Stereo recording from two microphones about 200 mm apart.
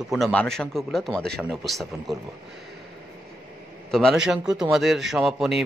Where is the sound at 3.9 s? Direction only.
Centre (ahead or behind).